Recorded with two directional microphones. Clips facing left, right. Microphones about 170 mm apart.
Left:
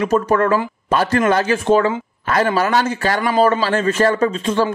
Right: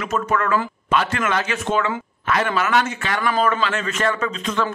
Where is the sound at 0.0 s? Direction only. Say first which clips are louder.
Left 6 dB; 35° left (ahead or behind).